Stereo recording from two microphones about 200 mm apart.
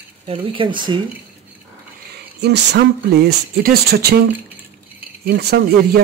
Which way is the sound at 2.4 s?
60° right (ahead or behind).